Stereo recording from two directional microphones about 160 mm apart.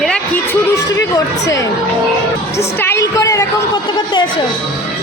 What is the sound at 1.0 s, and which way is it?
Speech, 20° left (ahead or behind).